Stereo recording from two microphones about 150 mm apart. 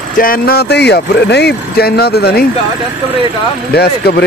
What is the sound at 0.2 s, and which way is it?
Speech, 80° left.